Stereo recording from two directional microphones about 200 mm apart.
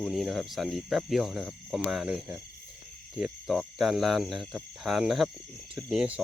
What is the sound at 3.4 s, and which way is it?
Speech, centre (ahead or behind).